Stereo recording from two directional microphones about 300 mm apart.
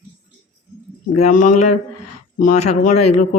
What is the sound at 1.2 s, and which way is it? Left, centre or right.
Speech, left.